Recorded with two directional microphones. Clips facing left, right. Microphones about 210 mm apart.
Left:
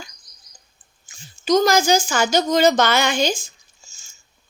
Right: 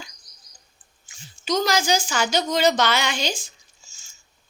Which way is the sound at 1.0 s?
45° left (ahead or behind).